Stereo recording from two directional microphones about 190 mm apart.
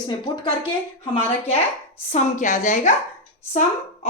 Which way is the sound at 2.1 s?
40° left (ahead or behind).